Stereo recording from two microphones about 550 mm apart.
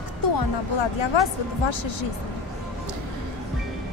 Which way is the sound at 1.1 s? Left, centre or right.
Left.